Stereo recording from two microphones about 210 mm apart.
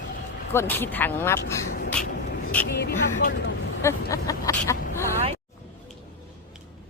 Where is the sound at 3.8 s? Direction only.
15° left (ahead or behind).